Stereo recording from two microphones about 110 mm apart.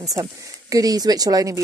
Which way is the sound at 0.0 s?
30° right (ahead or behind).